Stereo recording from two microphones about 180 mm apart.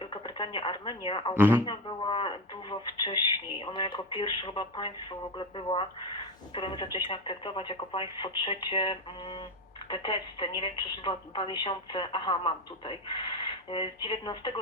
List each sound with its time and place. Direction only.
0.0 s speech: 30° left (ahead or behind)
1.4 s speech: 10° right (ahead or behind)
1.6 s speech: 25° left (ahead or behind)